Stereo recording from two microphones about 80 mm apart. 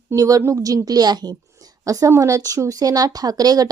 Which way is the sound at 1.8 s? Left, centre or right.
Right.